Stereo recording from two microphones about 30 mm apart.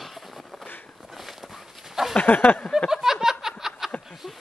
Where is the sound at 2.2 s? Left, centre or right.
Left.